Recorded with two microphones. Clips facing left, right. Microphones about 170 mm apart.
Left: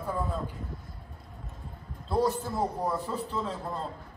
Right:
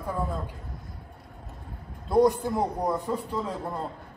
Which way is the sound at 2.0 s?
15° right (ahead or behind).